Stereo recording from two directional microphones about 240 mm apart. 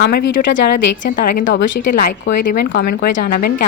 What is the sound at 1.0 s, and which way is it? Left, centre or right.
Speech, left.